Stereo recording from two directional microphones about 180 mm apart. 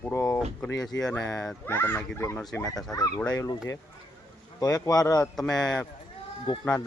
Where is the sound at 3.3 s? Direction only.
20° left (ahead or behind).